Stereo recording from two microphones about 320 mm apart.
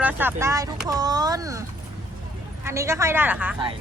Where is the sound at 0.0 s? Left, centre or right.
Centre.